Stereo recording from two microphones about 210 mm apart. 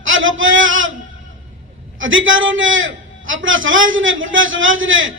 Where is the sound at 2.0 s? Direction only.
65° right (ahead or behind).